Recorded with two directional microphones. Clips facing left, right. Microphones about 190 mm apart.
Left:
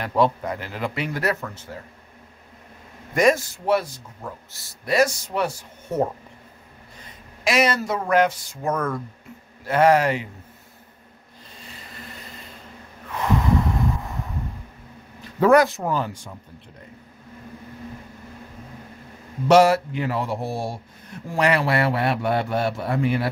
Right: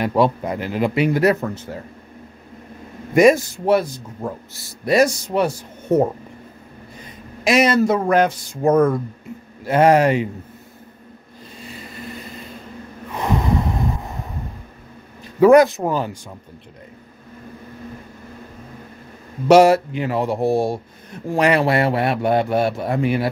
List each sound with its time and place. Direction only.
0.0 s speech: 10° right (ahead or behind)
3.2 s speech: 15° right (ahead or behind)
7.0 s speech: 20° right (ahead or behind)
13.1 s snort: 15° right (ahead or behind)
15.4 s speech: 20° right (ahead or behind)
19.4 s speech: 15° right (ahead or behind)